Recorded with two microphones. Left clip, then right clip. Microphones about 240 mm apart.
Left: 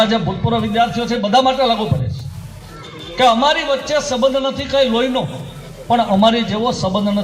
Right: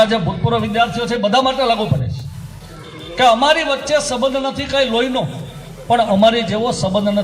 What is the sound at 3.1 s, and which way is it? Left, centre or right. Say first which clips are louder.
A man's voice: right 1 dB; right.